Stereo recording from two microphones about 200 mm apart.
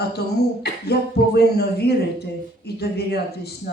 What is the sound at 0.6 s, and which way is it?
Speech, 55° left (ahead or behind).